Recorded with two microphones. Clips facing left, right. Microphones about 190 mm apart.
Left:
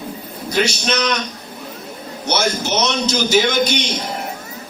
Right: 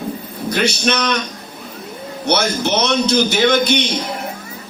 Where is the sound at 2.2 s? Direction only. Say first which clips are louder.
Right 2 dB; 60° right (ahead or behind).